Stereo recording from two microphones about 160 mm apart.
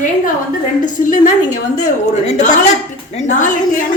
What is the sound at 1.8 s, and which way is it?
A woman's voice, 45° left (ahead or behind).